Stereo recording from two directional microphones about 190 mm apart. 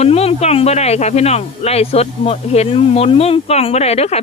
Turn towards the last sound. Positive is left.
turn(degrees=35)  # may be behind; listen again after turning